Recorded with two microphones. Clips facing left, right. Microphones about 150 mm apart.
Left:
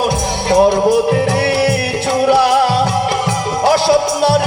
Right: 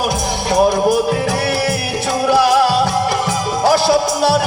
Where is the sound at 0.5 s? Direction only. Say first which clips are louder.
Left 3 dB; 25° left (ahead or behind).